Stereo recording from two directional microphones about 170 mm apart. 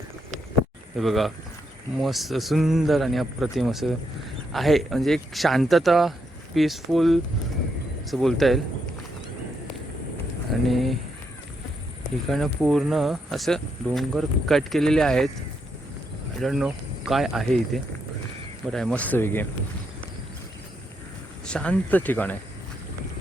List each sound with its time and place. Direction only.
0.9 s speech: centre (ahead or behind)
10.5 s speech: centre (ahead or behind)
12.3 s speech: centre (ahead or behind)
16.4 s speech: centre (ahead or behind)
21.4 s speech: 5° left (ahead or behind)